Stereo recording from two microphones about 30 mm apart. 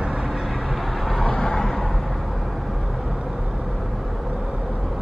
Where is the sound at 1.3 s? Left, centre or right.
Centre.